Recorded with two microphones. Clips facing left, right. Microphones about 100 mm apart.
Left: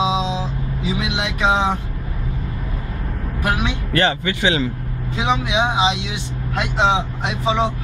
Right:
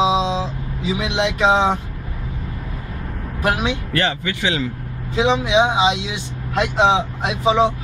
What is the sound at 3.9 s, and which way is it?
Speech, 30° left (ahead or behind).